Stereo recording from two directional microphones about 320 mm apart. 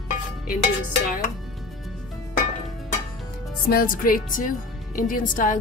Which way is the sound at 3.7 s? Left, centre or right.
Left.